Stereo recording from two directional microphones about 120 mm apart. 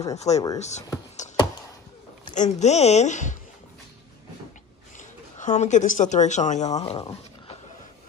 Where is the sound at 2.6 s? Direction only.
65° left (ahead or behind); by 3.3 s 85° left.